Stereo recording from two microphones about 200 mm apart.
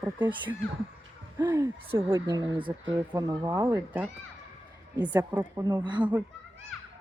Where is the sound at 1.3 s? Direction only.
15° right (ahead or behind).